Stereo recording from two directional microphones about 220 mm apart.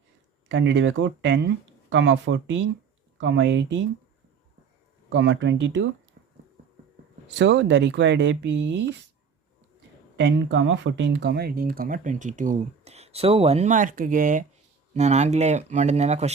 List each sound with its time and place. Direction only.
0.4 s speech: 55° right (ahead or behind)
5.0 s speech: 55° right (ahead or behind)
7.3 s speech: 55° right (ahead or behind)
10.2 s speech: 55° right (ahead or behind); by 16.3 s 30° right (ahead or behind)